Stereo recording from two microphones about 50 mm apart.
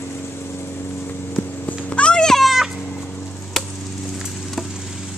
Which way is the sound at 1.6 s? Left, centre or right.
Left.